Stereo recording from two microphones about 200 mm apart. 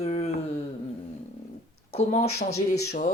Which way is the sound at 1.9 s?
35° left (ahead or behind).